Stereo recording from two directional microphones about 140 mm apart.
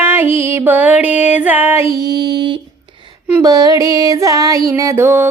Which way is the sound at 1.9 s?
30° right (ahead or behind).